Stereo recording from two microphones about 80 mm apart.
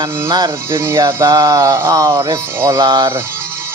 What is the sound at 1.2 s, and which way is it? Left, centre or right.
Music, right.